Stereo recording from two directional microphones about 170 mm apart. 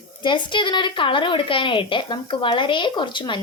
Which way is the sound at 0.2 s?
30° left (ahead or behind).